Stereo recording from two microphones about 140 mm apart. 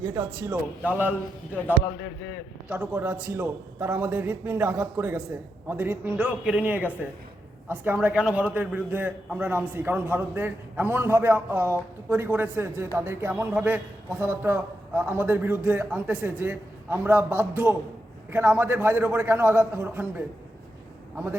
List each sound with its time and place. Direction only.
0.0 s a man's voice: 20° right (ahead or behind)
2.6 s a man's voice: 10° right (ahead or behind)